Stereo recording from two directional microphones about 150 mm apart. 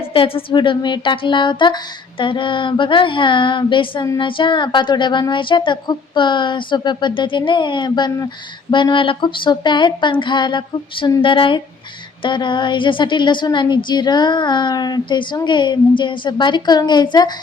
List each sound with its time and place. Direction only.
0.1 s a woman's voice: 35° left (ahead or behind)